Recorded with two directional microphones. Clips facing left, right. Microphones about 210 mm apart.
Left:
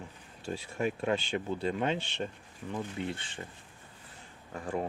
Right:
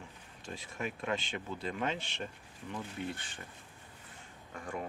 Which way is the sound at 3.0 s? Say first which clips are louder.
Left 2 dB; 25° left (ahead or behind).